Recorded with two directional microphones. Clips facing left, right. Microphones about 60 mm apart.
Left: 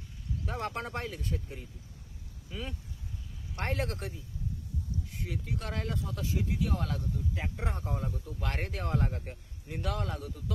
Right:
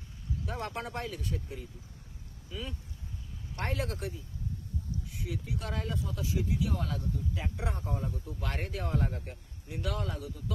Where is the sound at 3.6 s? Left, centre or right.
Left.